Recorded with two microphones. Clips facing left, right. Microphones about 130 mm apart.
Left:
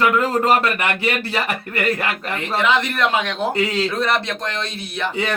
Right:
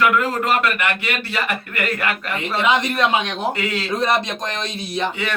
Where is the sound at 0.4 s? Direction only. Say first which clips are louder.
Left 2 dB; 30° left (ahead or behind).